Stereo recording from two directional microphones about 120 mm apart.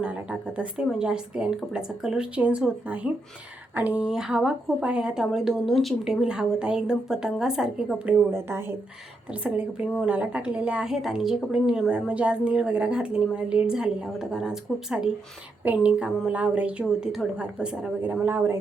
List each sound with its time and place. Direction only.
0.0 s a woman's voice: 10° right (ahead or behind)
8.3 s a woman's voice: 20° right (ahead or behind)